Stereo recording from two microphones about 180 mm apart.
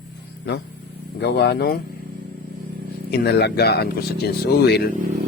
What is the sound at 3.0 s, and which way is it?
Speech, 65° left (ahead or behind).